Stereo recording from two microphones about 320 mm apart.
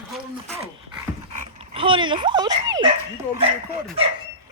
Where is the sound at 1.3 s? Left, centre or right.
Centre.